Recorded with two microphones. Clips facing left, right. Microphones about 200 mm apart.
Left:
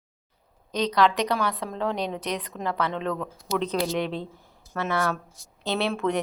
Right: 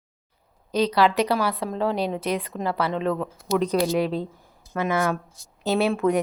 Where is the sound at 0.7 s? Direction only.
5° right (ahead or behind).